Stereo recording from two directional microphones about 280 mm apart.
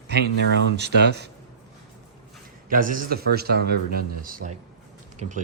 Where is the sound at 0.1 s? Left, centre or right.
Right.